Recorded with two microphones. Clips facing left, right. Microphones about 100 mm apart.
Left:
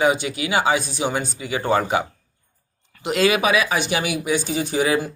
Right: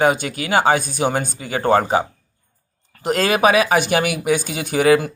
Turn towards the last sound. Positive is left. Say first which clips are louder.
# right 5 dB
turn(degrees=-60)  # may be behind; listen again after turning